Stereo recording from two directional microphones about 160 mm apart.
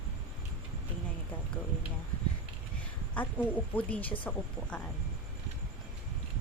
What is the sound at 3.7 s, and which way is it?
A woman's voice, 10° left (ahead or behind).